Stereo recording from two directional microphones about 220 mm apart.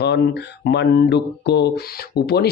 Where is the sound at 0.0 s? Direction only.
50° left (ahead or behind).